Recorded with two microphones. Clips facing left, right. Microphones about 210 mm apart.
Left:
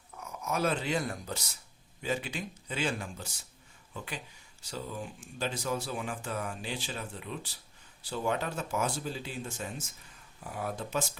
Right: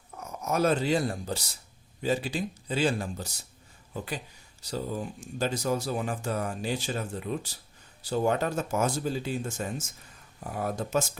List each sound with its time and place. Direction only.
0.2 s speech: 40° right (ahead or behind)